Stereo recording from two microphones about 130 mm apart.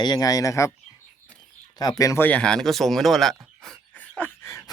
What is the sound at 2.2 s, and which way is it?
Speech, 10° left (ahead or behind).